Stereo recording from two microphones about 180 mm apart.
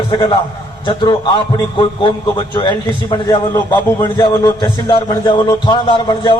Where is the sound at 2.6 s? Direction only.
25° left (ahead or behind).